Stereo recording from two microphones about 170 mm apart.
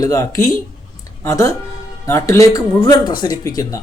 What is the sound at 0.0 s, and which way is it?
Speech, 20° left (ahead or behind).